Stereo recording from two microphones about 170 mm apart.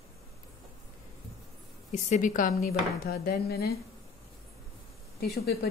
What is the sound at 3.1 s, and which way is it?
Speech, 65° left (ahead or behind).